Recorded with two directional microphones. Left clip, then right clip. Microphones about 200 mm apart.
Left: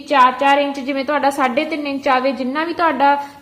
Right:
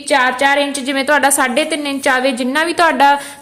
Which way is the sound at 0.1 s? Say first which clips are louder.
Even; 50° right (ahead or behind).